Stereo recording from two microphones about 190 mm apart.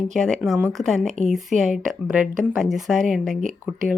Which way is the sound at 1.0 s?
40° right (ahead or behind).